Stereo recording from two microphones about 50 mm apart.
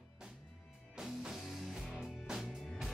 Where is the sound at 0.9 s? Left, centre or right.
Centre.